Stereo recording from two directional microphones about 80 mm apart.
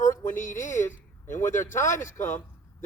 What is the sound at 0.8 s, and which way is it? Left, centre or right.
A man's voice, left.